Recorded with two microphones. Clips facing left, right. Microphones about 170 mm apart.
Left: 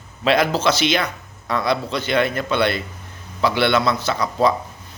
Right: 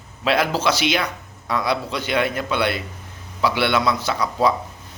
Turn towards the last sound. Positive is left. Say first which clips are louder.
# left 1 dB
turn(degrees=-10)  # may be behind; listen again after turning